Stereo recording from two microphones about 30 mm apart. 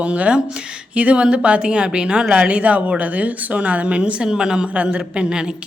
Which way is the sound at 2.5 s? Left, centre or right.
Right.